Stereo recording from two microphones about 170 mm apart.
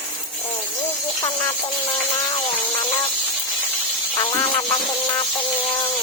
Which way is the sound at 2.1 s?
20° left (ahead or behind).